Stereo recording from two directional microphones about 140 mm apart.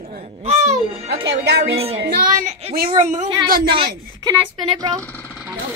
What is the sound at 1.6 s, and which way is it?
Speech, 45° right (ahead or behind).